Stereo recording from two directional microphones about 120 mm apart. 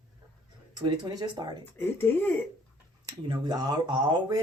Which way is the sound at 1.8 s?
15° left (ahead or behind).